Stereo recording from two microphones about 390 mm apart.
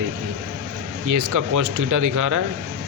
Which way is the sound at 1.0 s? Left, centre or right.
Right.